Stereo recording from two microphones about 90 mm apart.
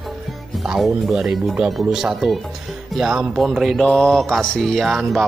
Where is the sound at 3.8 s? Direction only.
10° left (ahead or behind).